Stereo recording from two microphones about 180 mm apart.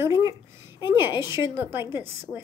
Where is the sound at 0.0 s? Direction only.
15° right (ahead or behind).